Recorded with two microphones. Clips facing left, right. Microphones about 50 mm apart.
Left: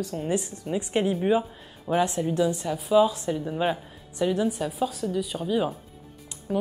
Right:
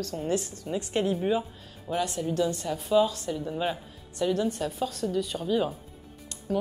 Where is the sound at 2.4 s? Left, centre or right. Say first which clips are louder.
Left 2 dB; centre.